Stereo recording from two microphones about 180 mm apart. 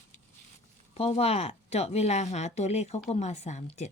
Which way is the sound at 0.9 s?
35° left (ahead or behind).